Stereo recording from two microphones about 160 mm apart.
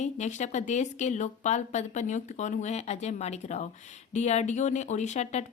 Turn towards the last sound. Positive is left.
turn(degrees=45)  # may be behind; listen again after turning